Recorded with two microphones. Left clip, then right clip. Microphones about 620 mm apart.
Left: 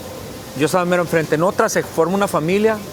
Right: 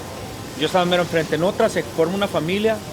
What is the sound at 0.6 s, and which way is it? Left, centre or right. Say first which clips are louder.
Speech: left 2 dB; left.